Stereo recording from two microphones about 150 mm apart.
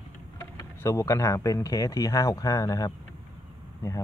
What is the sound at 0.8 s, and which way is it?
Speech, 20° left (ahead or behind).